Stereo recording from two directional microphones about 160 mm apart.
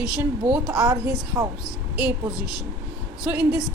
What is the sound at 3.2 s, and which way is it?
Speech, 5° right (ahead or behind).